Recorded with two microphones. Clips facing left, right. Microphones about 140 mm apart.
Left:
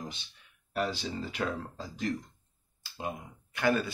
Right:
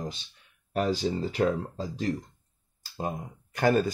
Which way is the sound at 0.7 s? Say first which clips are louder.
Right 6 dB; 40° right (ahead or behind).